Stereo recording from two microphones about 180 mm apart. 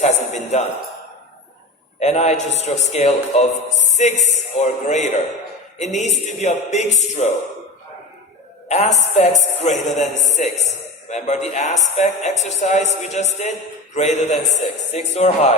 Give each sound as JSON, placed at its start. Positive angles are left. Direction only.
{"t": 0.0, "sound": "a sound", "side_deg": 40}
{"t": 2.0, "sound": "speech", "side_deg": 40}
{"t": 8.7, "sound": "speech", "side_deg": 40}
{"t": 11.1, "sound": "speech", "side_deg": 40}